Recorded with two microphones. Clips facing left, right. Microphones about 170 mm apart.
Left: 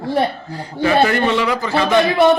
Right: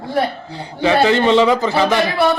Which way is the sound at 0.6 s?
20° right (ahead or behind).